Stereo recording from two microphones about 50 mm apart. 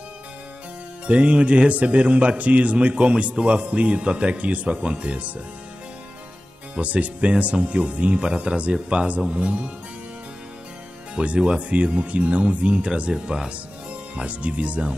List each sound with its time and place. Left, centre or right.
1.0 s a man's voice: right
6.7 s a man's voice: right
11.1 s a man's voice: right
14.1 s a man's voice: right